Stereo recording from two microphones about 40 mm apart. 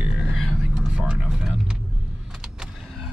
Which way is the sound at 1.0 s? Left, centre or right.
Centre.